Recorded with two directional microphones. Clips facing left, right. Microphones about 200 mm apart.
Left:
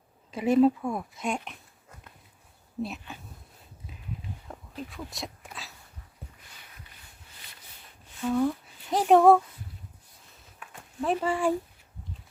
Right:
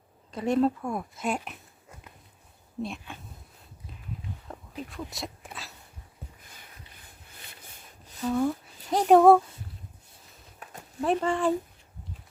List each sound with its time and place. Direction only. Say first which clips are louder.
0.3 s speech: left 3 dB; 5° left (ahead or behind)
2.8 s speech: left 1 dB; 5° left (ahead or behind)
4.4 s a sound: even; centre (ahead or behind)
8.2 s speech: even; centre (ahead or behind)
10.6 s a sound: right 2 dB; 40° right (ahead or behind)
11.0 s speech: right 1 dB; 5° left (ahead or behind)